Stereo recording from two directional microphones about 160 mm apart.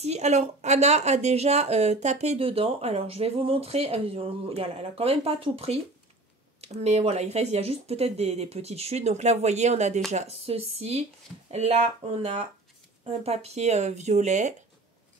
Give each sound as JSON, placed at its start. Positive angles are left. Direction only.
{"t": 0.0, "sound": "speech", "side_deg": -45}